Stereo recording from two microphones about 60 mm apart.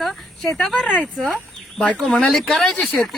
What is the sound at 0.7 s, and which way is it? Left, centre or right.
Speech, centre.